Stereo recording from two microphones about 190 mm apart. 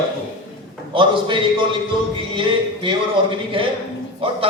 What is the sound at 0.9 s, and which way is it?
A man's voice, 25° right (ahead or behind).